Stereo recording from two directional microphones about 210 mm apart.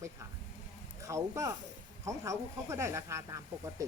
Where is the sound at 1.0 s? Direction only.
15° right (ahead or behind).